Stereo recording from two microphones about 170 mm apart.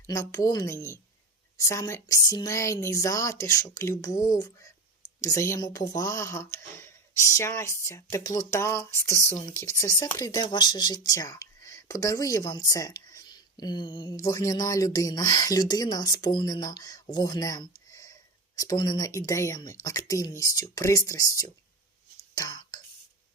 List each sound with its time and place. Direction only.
0.1 s speech: 20° left (ahead or behind)
9.1 s speech: 40° left (ahead or behind)
9.6 s speech: 20° left (ahead or behind)
22.4 s whispering: 20° left (ahead or behind)